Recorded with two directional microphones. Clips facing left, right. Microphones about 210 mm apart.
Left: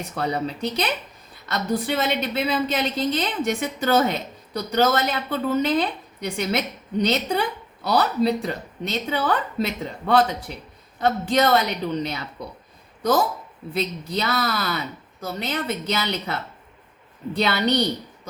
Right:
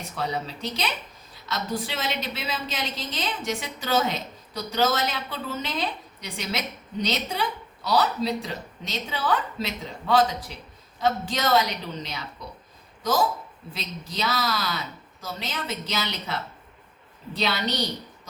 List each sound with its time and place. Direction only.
0.2 s a woman's voice: 55° left (ahead or behind)
13.0 s a woman's voice: 60° left (ahead or behind)